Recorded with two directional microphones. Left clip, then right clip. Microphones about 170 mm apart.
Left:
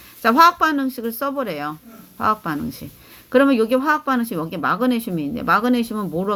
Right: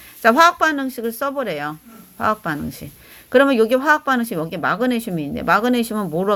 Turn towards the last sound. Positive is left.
turn(degrees=-40)  # may be behind; listen again after turning